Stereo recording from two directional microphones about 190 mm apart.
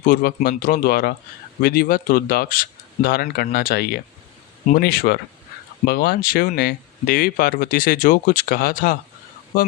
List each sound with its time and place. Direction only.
0.0 s speech: 50° left (ahead or behind)